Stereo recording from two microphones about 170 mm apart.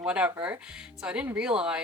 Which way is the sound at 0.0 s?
5° right (ahead or behind).